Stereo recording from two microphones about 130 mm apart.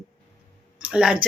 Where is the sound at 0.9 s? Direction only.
5° right (ahead or behind).